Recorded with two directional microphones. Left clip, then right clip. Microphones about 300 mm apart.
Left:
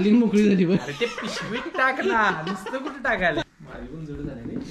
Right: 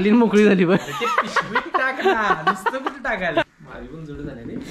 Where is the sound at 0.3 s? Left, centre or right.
Centre.